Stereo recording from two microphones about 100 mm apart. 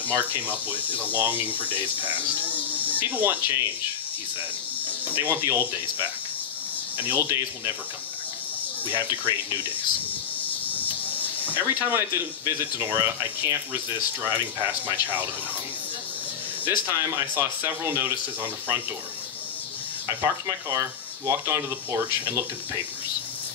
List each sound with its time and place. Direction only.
0.0 s speech: 15° right (ahead or behind)
4.8 s speech: 20° right (ahead or behind)
8.9 s speech: 20° right (ahead or behind)
11.4 s speech: 20° right (ahead or behind)
16.8 s speech: 20° right (ahead or behind)
20.1 s speech: 30° right (ahead or behind)